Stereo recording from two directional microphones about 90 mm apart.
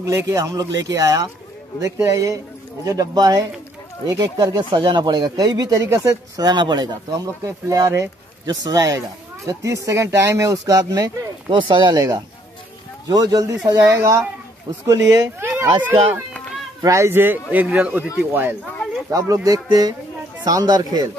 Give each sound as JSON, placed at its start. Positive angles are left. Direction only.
{"t": 0.0, "sound": "speech", "side_deg": -35}
{"t": 4.6, "sound": "speech", "side_deg": -60}
{"t": 6.4, "sound": "speech", "side_deg": -55}
{"t": 7.4, "sound": "speech", "side_deg": -35}
{"t": 11.5, "sound": "speech", "side_deg": -60}
{"t": 16.8, "sound": "a man's voice", "side_deg": -30}
{"t": 19.0, "sound": "speech", "side_deg": -40}